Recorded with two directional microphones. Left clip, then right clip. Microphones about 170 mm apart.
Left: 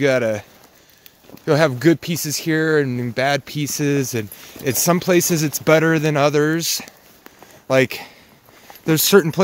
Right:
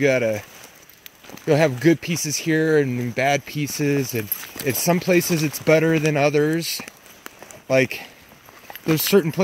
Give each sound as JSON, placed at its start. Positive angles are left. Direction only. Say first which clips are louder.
{"t": 0.0, "sound": "speech", "louder": "left 2 dB", "side_deg": 15}